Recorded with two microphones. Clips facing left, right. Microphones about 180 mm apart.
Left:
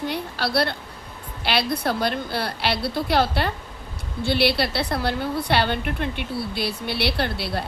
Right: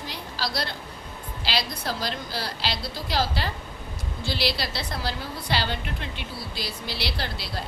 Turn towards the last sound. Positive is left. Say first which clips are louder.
# left 7 dB
turn(degrees=60)  # may be behind; listen again after turning